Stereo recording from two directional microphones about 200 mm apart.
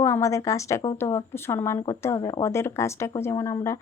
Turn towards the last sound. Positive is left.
turn(degrees=15)  # may be behind; listen again after turning